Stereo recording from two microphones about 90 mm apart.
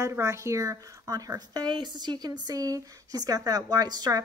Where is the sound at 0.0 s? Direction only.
35° right (ahead or behind).